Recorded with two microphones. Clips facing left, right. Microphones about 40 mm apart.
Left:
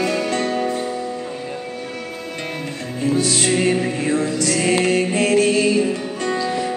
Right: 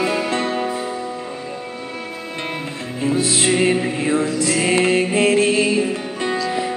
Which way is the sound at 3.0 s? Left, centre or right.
Centre.